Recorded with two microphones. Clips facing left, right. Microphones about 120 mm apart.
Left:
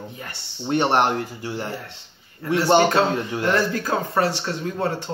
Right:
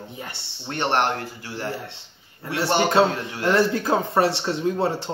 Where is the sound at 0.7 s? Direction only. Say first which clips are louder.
Left 3 dB; 15° left (ahead or behind).